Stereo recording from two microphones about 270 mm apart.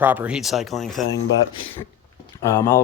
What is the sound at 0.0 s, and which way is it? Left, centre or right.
Speech, centre.